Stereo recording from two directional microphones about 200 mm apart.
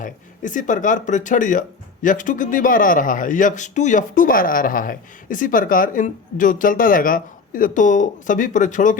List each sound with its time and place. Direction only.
0.0 s speech: 40° left (ahead or behind)